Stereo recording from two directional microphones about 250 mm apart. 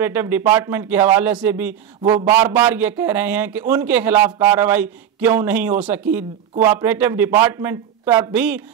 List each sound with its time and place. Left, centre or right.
0.0 s speech: centre